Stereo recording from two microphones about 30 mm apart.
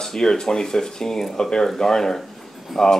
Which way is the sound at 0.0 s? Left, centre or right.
Centre.